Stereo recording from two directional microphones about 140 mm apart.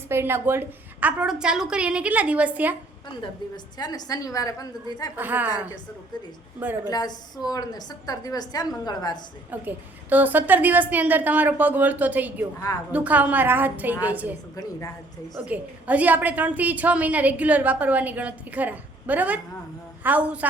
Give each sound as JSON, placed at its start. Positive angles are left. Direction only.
{"t": 0.1, "sound": "a woman's voice", "side_deg": -15}
{"t": 3.2, "sound": "a woman's voice", "side_deg": 30}
{"t": 5.1, "sound": "a woman's voice", "side_deg": -15}
{"t": 6.9, "sound": "a woman's voice", "side_deg": 30}
{"t": 9.5, "sound": "a woman's voice", "side_deg": -10}
{"t": 14.5, "sound": "a woman's voice", "side_deg": 20}
{"t": 15.4, "sound": "a woman's voice", "side_deg": -10}